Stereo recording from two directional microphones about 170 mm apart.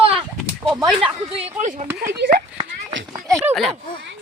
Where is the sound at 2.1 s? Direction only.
80° right.